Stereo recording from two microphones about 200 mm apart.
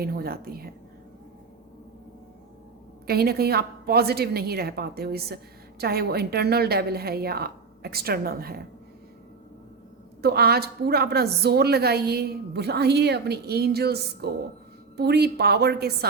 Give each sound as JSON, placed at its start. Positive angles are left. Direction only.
{"t": 0.0, "sound": "a woman's voice", "side_deg": -50}
{"t": 3.1, "sound": "a woman's voice", "side_deg": -50}
{"t": 10.2, "sound": "a woman's voice", "side_deg": -50}